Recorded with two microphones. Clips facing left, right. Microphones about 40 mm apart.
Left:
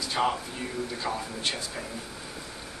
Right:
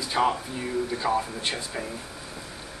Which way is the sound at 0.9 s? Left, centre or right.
Centre.